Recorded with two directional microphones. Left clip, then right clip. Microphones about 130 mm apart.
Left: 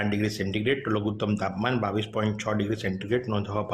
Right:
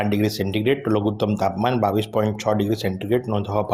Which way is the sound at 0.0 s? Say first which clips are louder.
Right 6 dB; 20° right (ahead or behind).